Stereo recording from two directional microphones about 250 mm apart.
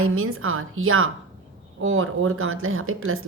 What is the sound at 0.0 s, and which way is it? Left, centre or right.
A woman's voice, right.